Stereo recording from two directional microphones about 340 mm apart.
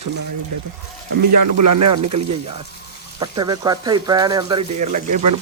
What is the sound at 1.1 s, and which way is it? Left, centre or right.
Speech, right.